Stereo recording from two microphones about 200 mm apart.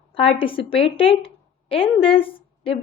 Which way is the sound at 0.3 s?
25° left (ahead or behind).